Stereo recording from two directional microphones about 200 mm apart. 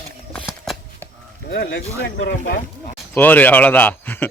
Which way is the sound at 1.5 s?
65° left (ahead or behind).